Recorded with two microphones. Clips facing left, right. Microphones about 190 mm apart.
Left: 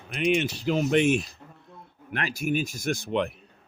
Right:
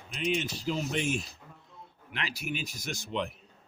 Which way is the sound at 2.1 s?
50° left (ahead or behind).